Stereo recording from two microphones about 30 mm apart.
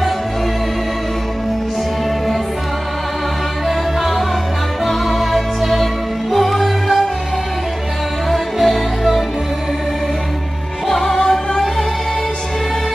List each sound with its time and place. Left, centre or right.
3.6 s music: centre
8.3 s music: centre
10.9 s opera: centre
11.1 s music: left